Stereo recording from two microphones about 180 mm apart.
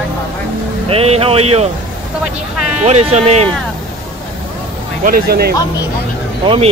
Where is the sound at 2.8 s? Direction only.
35° right (ahead or behind).